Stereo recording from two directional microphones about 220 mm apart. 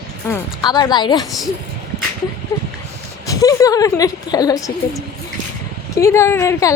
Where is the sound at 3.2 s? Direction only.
15° left (ahead or behind).